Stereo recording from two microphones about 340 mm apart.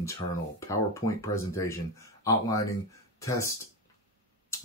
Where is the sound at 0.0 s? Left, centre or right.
Centre.